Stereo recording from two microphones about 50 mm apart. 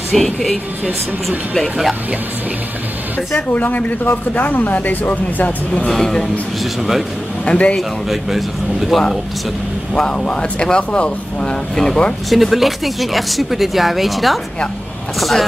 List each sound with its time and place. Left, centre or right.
0.1 s speech: centre
3.5 s speech: left
5.9 s a man's voice: centre
6.6 s speech: centre
7.4 s speech: left
8.1 s speech: centre
9.9 s speech: centre
12.3 s speech: centre